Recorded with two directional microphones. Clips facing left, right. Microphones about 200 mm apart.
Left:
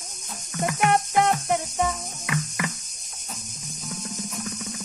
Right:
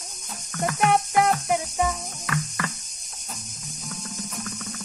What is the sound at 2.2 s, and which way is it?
Cricket, 15° left (ahead or behind).